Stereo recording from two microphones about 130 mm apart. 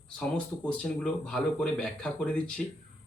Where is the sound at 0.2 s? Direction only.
10° left (ahead or behind).